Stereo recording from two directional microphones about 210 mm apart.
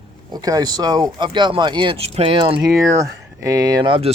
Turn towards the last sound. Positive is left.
turn(degrees=-25)  # may be behind; listen again after turning